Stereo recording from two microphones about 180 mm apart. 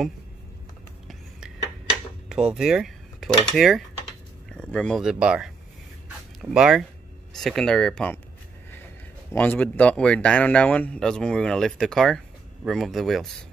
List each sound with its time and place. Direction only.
2.2 s speech: 5° right (ahead or behind)
6.0 s a sound: 5° right (ahead or behind)
7.3 s speech: centre (ahead or behind)
9.3 s speech: 10° left (ahead or behind)